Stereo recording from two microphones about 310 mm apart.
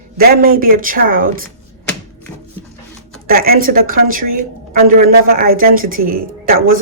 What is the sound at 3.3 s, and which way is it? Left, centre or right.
Speech, right.